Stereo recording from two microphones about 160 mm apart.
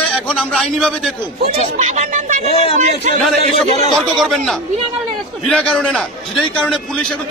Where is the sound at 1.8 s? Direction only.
45° right (ahead or behind).